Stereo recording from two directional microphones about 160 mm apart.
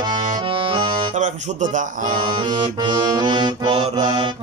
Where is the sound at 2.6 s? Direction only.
30° right (ahead or behind).